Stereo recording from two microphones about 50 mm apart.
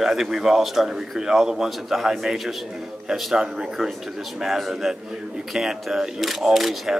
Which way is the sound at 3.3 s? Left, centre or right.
Centre.